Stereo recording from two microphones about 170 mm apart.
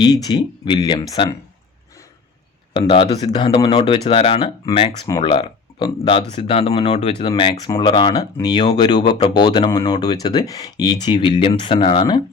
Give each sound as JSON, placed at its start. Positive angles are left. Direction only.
{"t": 0.0, "sound": "speech", "side_deg": 25}
{"t": 2.7, "sound": "speech", "side_deg": 30}